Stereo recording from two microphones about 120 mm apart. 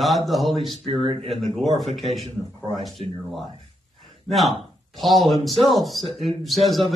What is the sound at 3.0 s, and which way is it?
Speech, 55° right (ahead or behind).